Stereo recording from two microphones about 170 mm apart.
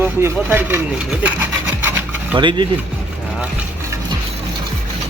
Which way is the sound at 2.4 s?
30° right (ahead or behind).